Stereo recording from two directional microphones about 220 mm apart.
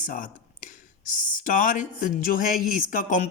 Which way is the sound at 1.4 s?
35° left (ahead or behind).